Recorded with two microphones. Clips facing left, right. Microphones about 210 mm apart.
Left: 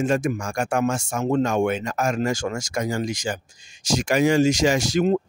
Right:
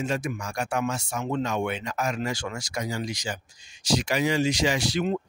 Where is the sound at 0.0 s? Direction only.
50° left (ahead or behind).